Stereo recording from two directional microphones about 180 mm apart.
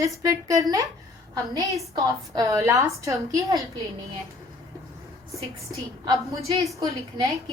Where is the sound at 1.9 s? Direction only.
20° right (ahead or behind).